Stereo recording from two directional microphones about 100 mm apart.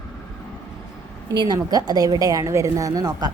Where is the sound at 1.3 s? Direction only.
45° right (ahead or behind).